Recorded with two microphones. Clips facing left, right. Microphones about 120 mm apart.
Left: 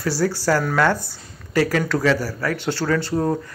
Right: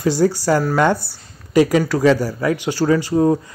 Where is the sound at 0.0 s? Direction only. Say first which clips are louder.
Right 5 dB; 20° right (ahead or behind).